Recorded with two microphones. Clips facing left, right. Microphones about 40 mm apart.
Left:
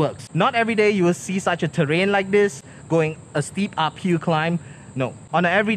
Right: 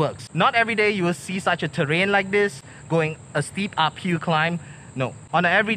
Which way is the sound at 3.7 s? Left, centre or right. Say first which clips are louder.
Even; right.